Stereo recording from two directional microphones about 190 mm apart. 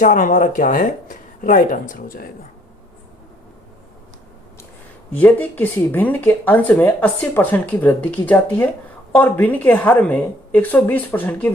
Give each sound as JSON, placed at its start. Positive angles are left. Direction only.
{"t": 0.0, "sound": "speech", "side_deg": 45}
{"t": 5.1, "sound": "speech", "side_deg": 10}